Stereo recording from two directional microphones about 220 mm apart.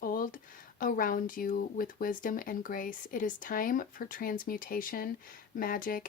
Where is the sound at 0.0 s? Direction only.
40° left (ahead or behind).